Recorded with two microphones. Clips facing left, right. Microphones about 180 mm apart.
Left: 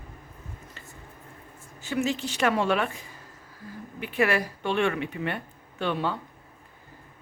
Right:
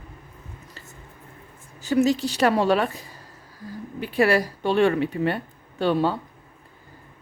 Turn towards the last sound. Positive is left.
turn(degrees=-35)  # may be behind; listen again after turning